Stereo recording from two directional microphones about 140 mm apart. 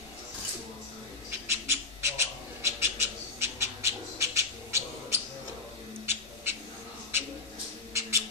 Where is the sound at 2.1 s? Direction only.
20° right (ahead or behind).